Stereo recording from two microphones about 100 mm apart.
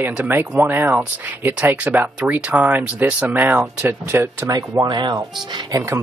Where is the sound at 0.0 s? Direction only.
20° right (ahead or behind).